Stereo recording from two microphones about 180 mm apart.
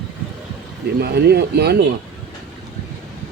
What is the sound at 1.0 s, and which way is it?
Speech, 65° right (ahead or behind).